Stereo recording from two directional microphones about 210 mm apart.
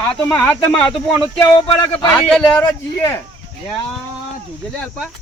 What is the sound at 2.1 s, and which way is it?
Speech, 5° left (ahead or behind).